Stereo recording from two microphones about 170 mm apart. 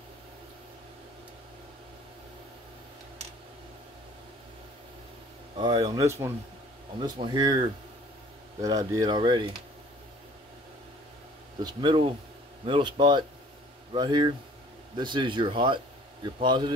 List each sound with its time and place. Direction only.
5.6 s speech: 25° right (ahead or behind)
11.6 s speech: 30° right (ahead or behind)